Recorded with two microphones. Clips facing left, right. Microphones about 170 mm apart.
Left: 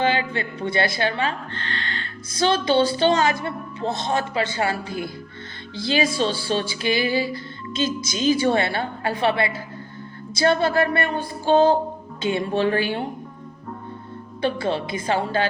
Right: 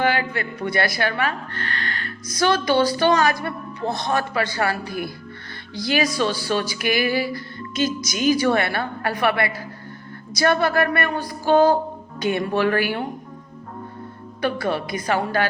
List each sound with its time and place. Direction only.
0.0 s speech: 25° left (ahead or behind)
14.4 s speech: 25° left (ahead or behind)